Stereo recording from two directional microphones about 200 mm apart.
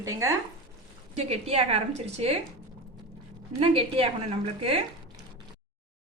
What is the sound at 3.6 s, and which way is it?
A woman's voice, 30° right (ahead or behind).